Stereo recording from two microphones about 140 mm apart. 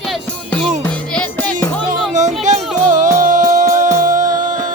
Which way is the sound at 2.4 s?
60° right (ahead or behind).